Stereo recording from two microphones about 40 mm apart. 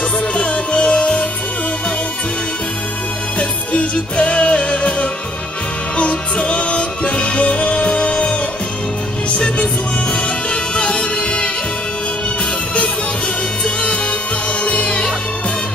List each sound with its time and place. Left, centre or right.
0.3 s music: left
3.3 s music: left
10.5 s music: left
14.6 s music: left